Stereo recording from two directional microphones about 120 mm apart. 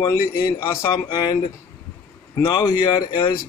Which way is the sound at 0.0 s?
30° left (ahead or behind).